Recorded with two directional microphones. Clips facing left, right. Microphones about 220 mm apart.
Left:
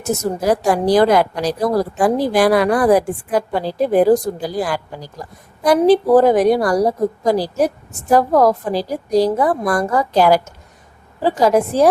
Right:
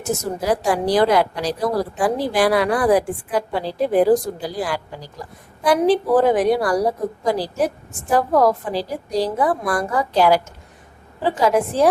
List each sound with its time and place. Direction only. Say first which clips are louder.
0.4 s a woman's voice: left 4 dB; 45° left (ahead or behind)